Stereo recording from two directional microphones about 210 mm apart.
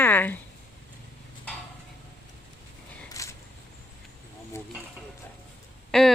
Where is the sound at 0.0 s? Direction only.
10° left (ahead or behind).